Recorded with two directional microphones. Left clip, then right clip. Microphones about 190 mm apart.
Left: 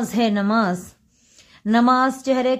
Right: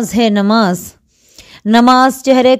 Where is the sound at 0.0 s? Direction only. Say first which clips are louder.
Right 8 dB; 45° right (ahead or behind).